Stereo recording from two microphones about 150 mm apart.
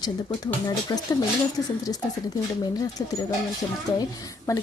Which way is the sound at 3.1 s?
25° left (ahead or behind).